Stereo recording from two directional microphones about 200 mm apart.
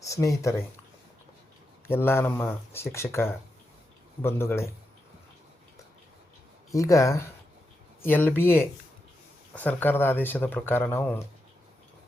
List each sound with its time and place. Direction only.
0.0 s speech: 15° left (ahead or behind)
1.9 s speech: 10° left (ahead or behind)
6.7 s speech: 15° left (ahead or behind)